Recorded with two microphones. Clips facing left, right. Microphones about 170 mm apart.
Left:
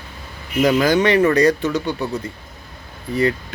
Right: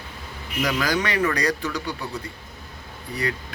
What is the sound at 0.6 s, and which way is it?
Speech, 25° left (ahead or behind).